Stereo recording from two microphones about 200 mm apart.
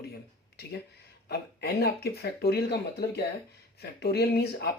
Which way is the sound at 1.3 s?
50° left (ahead or behind).